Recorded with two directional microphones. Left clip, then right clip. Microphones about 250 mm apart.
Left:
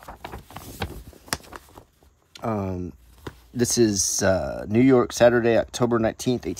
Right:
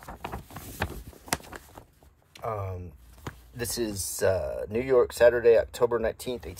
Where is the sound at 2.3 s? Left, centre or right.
Left.